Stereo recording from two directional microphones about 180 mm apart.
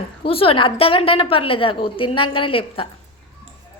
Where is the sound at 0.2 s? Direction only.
30° left (ahead or behind).